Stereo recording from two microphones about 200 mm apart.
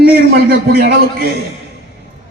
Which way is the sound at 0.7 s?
50° right (ahead or behind).